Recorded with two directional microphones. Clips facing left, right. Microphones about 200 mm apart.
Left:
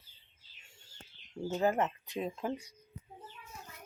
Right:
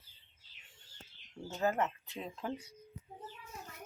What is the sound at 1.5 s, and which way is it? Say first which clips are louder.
Speech: left 3 dB; 20° left (ahead or behind).